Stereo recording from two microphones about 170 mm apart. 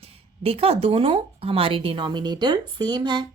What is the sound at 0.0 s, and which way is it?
A woman's voice, 35° right (ahead or behind).